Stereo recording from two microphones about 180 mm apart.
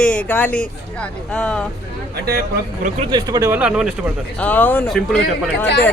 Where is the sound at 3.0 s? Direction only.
25° right (ahead or behind).